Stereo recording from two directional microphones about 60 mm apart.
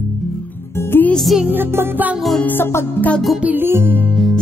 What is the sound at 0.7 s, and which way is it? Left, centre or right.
Music, left.